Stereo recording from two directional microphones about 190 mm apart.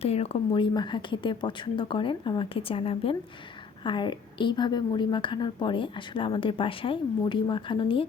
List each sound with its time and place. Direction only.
0.0 s a woman's voice: 30° left (ahead or behind)